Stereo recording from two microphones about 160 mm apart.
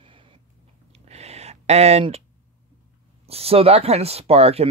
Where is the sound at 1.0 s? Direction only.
40° right (ahead or behind).